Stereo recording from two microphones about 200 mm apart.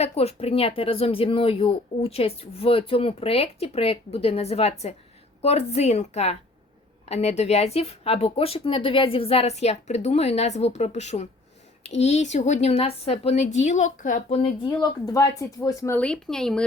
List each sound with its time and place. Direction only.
0.0 s a woman's voice: 30° left (ahead or behind)
14.4 s speech: 25° left (ahead or behind); by 16.6 s 5° left (ahead or behind)